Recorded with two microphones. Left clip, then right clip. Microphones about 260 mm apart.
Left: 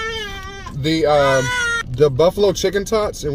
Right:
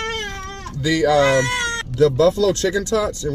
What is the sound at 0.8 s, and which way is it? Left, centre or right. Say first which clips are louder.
Speech: left 1 dB; centre.